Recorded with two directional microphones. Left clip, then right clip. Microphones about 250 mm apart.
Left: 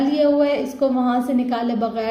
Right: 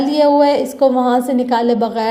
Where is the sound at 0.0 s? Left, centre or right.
Right.